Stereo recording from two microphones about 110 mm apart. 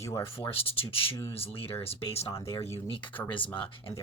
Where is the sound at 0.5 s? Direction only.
60° left (ahead or behind).